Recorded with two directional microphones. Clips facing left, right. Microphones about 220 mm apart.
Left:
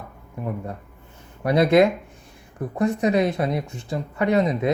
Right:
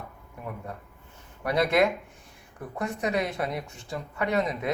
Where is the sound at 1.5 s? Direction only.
20° left (ahead or behind).